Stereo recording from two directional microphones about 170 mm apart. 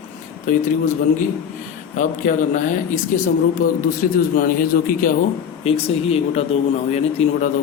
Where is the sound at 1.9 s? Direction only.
50° left (ahead or behind).